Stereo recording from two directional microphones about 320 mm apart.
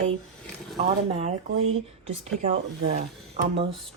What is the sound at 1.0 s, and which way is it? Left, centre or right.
Speech, centre.